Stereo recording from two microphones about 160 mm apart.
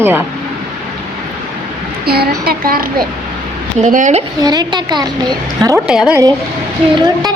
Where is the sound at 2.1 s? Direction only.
75° right (ahead or behind).